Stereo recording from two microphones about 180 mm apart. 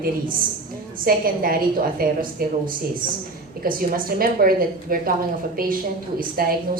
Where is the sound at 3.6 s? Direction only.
50° right (ahead or behind).